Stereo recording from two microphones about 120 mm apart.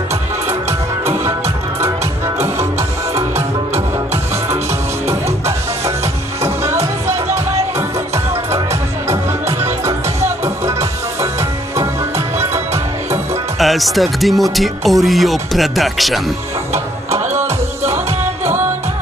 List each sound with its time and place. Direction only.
2.4 s music: 25° right (ahead or behind)
5.0 s music: 25° right (ahead or behind)
9.6 s music: 20° right (ahead or behind)
13.6 s speech: centre (ahead or behind)